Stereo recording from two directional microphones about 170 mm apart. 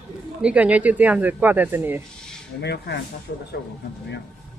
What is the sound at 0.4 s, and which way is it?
Speech, 5° right (ahead or behind).